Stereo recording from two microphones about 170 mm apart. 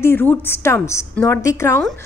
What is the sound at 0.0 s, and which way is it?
A woman's voice, 10° left (ahead or behind).